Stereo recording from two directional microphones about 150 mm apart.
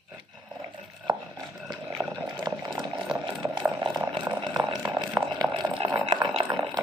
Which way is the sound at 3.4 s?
30° right (ahead or behind).